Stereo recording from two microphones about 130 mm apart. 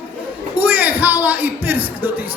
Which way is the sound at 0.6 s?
15° right (ahead or behind).